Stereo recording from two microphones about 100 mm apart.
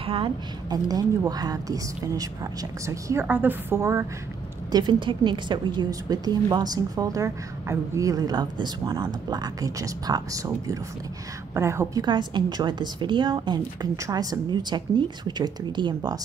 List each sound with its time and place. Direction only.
0.0 s a woman's voice: 70° right (ahead or behind)
0.7 s speech: 40° right (ahead or behind)
3.3 s a woman's voice: 20° right (ahead or behind)
4.7 s a woman's voice: 50° right (ahead or behind); by 12.0 s 30° right (ahead or behind)
12.0 s a woman's voice: 50° right (ahead or behind)